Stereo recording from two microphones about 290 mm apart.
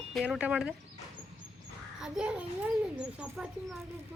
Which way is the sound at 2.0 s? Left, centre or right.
Centre.